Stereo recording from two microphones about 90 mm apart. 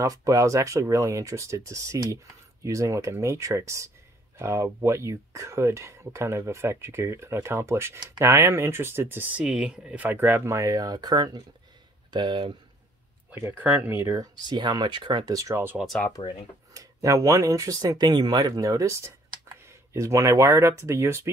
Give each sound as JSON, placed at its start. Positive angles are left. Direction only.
{"t": 0.0, "sound": "speech", "side_deg": -40}
{"t": 10.0, "sound": "speech", "side_deg": -25}
{"t": 12.1, "sound": "speech", "side_deg": -60}
{"t": 13.3, "sound": "speech", "side_deg": -25}
{"t": 13.9, "sound": "speech", "side_deg": -30}
{"t": 14.3, "sound": "speech", "side_deg": -50}
{"t": 15.3, "sound": "speech", "side_deg": -40}
{"t": 16.2, "sound": "speech", "side_deg": 40}
{"t": 16.7, "sound": "speech", "side_deg": -40}